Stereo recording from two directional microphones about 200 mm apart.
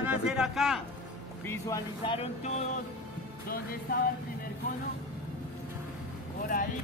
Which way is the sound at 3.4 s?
45° left (ahead or behind).